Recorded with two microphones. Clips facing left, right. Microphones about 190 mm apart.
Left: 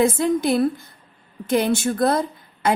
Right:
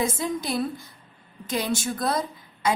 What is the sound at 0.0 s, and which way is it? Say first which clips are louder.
A woman's voice: left 8 dB; 60° left (ahead or behind).